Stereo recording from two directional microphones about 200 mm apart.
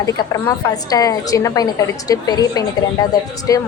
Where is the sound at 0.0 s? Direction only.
20° left (ahead or behind).